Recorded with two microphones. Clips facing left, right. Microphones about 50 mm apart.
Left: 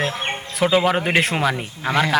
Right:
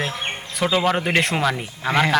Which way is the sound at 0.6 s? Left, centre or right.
Centre.